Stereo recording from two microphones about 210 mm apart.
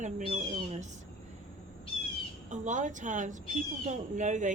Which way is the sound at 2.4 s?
35° right (ahead or behind).